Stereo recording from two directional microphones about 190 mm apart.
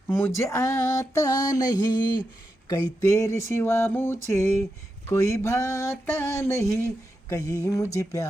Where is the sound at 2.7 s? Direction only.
20° left (ahead or behind).